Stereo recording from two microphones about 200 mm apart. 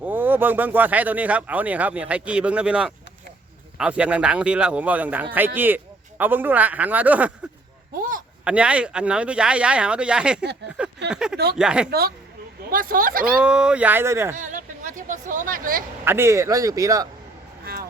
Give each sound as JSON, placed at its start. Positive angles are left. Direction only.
{"t": 0.0, "sound": "speech", "side_deg": -10}
{"t": 8.4, "sound": "speech", "side_deg": -5}
{"t": 10.8, "sound": "a sound", "side_deg": -5}
{"t": 11.5, "sound": "speech", "side_deg": -5}
{"t": 11.9, "sound": "speech", "side_deg": -50}
{"t": 13.4, "sound": "speech", "side_deg": -5}
{"t": 14.3, "sound": "a sound", "side_deg": -40}
{"t": 16.0, "sound": "speech", "side_deg": -10}